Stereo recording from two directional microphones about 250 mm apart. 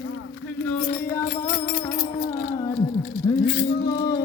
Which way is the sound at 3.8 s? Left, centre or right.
Centre.